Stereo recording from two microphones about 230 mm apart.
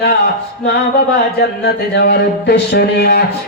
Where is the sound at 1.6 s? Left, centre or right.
Left.